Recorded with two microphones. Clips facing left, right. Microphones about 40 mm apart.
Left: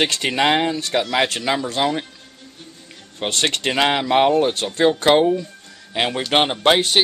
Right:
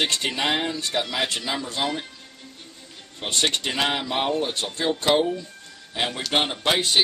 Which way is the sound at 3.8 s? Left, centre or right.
Left.